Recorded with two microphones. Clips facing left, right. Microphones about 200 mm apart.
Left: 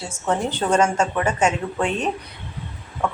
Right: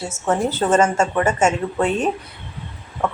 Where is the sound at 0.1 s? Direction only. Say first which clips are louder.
Right 2 dB; 5° right (ahead or behind).